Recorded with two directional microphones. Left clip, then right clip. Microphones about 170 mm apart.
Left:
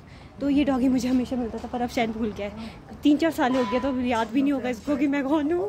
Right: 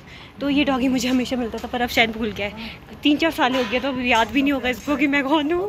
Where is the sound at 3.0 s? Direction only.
25° left (ahead or behind).